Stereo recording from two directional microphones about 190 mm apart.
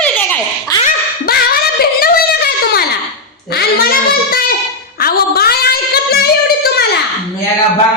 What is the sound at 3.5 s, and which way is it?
Child singing, 55° left (ahead or behind).